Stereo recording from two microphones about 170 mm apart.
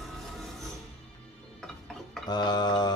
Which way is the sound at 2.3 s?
25° left (ahead or behind).